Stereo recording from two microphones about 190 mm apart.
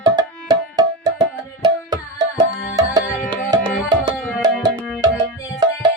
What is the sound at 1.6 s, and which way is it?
Tabla, 20° right (ahead or behind).